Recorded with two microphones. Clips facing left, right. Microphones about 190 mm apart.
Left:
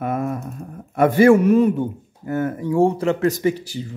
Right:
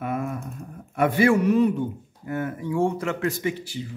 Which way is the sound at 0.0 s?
40° left (ahead or behind).